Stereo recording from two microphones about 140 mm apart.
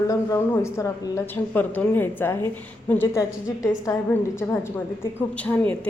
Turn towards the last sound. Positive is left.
turn(degrees=10)  # may be behind; listen again after turning